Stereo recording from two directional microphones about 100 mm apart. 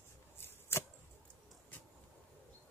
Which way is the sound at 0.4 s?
25° left (ahead or behind).